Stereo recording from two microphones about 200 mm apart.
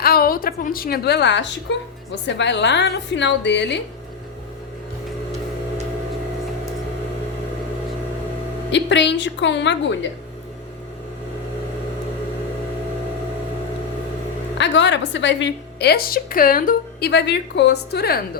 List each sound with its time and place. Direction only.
0.0 s a woman's voice: 50° left (ahead or behind)
8.7 s a woman's voice: 60° left (ahead or behind)
14.6 s a woman's voice: 65° left (ahead or behind)